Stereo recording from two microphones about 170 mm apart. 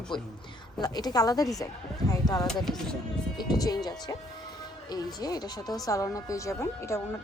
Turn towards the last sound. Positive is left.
turn(degrees=15)  # may be behind; listen again after turning